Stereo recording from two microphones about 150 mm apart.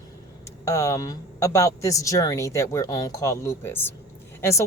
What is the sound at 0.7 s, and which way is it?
A woman's voice, 20° left (ahead or behind).